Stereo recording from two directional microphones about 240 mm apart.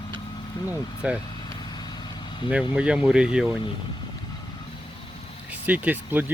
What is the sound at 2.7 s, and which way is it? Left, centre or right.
Speech, centre.